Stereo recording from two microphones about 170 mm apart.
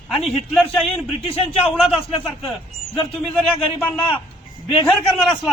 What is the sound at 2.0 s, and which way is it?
Speech, 30° left (ahead or behind).